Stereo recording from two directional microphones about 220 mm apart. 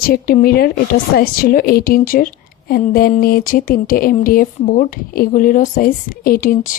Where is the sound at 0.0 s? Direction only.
40° left (ahead or behind).